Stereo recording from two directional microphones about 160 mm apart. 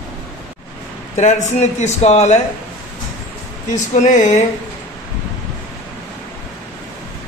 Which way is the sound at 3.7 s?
50° left (ahead or behind).